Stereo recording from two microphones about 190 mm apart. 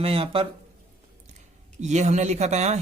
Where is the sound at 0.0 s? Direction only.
30° right (ahead or behind).